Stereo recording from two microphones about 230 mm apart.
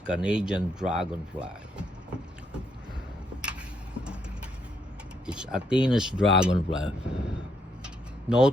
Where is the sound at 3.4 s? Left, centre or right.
Centre.